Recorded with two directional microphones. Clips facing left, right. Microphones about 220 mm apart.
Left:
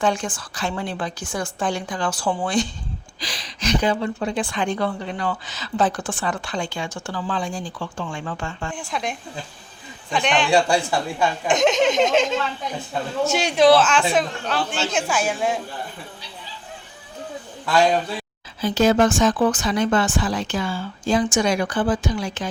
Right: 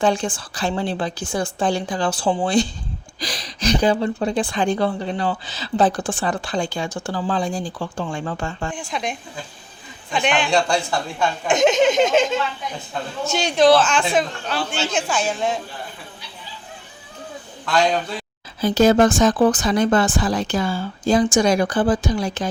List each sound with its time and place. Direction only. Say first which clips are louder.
0.0 s a woman's voice: right 3 dB; 30° right (ahead or behind)
3.2 s a woman's voice: right 6 dB; 40° right (ahead or behind)
8.7 s speech: right 1 dB; centre (ahead or behind)
11.5 s a man's voice: right 3 dB; centre (ahead or behind)
17.7 s speech: left 1 dB; 5° left (ahead or behind)
18.6 s a woman's voice: right 3 dB; 40° right (ahead or behind)